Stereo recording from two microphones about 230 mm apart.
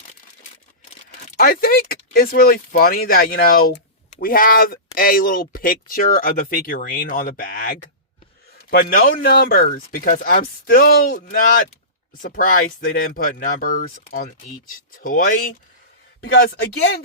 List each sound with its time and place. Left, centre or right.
1.2 s a man's voice: left